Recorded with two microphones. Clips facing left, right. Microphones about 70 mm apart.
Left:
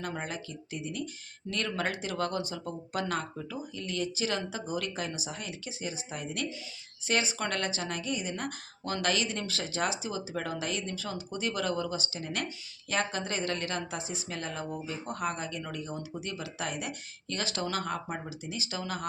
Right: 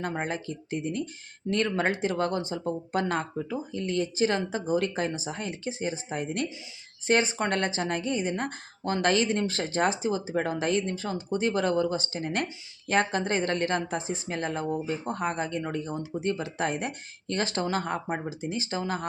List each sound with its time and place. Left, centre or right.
0.0 s a woman's voice: right